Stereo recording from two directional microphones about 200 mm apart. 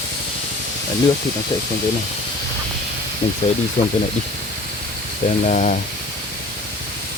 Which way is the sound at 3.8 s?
45° left (ahead or behind).